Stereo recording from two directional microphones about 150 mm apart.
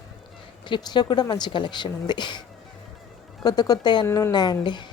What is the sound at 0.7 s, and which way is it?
A woman's voice, 30° left (ahead or behind).